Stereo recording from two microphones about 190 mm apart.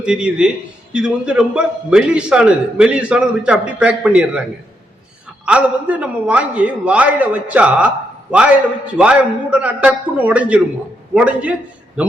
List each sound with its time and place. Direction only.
0.0 s a man's voice: 5° right (ahead or behind)
5.5 s a man's voice: 5° right (ahead or behind)